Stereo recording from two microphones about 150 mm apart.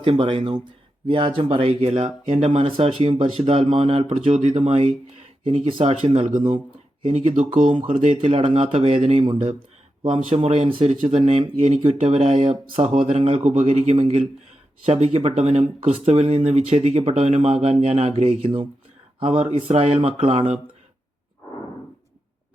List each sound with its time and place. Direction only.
0.0 s speech: 35° right (ahead or behind); by 7.7 s 50° right (ahead or behind)
7.7 s speech: 35° right (ahead or behind)
9.2 s speech: 35° right (ahead or behind)
13.4 s speech: 50° right (ahead or behind)